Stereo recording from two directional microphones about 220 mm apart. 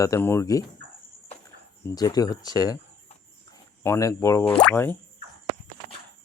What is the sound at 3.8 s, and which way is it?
Speech, 15° left (ahead or behind).